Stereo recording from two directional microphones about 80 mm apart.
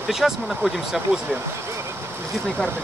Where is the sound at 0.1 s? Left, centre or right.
Centre.